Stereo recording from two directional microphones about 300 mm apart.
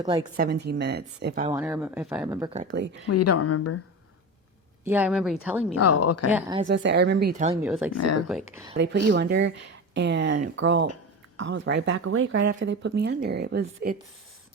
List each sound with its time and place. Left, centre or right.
0.0 s speech: centre
0.3 s speech: right
1.5 s speech: centre
2.7 s speech: right
3.1 s a woman's voice: left
4.9 s speech: centre
5.8 s a woman's voice: left
6.3 s speech: centre
6.7 s speech: right
7.6 s speech: centre
7.9 s speech: left
9.1 s speech: right